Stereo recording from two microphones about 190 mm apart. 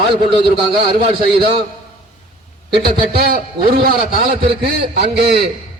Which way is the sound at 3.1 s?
50° right (ahead or behind).